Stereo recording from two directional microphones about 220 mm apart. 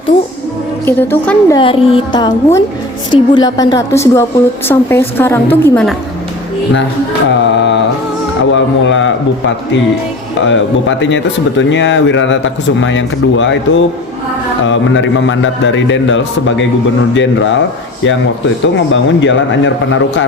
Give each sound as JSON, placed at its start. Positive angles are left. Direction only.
{"t": 0.9, "sound": "a woman's voice", "side_deg": 10}
{"t": 1.5, "sound": "a woman's voice", "side_deg": 25}
{"t": 7.3, "sound": "a man's voice", "side_deg": 55}
{"t": 10.4, "sound": "a man's voice", "side_deg": 60}
{"t": 18.6, "sound": "a man's voice", "side_deg": 55}